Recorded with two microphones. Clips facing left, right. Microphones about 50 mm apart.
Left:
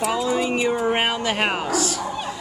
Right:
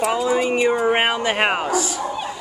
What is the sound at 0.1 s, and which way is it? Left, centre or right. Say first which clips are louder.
Speech: right 3 dB; centre.